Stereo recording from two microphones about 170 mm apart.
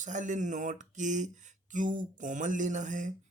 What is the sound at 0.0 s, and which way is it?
Speech, 45° right (ahead or behind).